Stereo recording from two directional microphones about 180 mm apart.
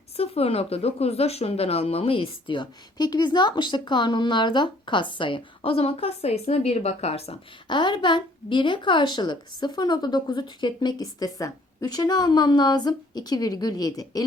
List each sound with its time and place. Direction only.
0.2 s speech: 35° left (ahead or behind)